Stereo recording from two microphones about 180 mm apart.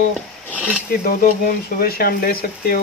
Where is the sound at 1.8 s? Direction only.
55° left (ahead or behind).